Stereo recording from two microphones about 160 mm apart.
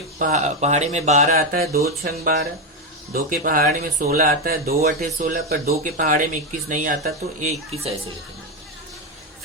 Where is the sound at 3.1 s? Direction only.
60° right (ahead or behind).